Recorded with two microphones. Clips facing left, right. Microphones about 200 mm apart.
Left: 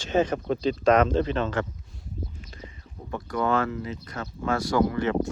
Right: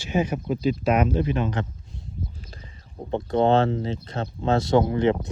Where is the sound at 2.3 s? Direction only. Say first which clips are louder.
Left 2 dB; 35° right (ahead or behind).